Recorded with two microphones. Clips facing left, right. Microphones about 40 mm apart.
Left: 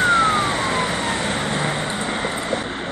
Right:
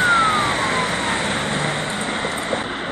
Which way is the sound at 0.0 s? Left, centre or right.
Centre.